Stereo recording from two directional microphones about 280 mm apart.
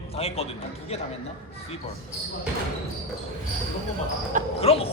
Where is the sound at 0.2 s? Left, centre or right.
Left.